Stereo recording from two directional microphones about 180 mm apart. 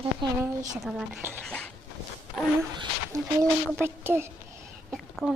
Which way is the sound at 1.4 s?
10° left (ahead or behind).